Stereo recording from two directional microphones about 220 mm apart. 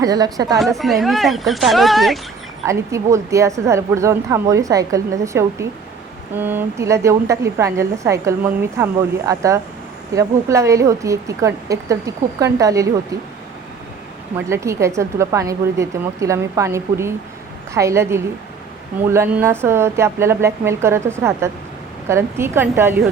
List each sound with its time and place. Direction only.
0.0 s a woman's voice: 15° right (ahead or behind)
0.6 s speech: centre (ahead or behind)
2.6 s a woman's voice: 15° right (ahead or behind)
14.3 s a woman's voice: 10° right (ahead or behind)